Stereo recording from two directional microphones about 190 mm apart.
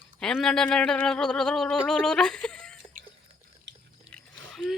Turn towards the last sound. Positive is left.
turn(degrees=5)  # may be behind; listen again after turning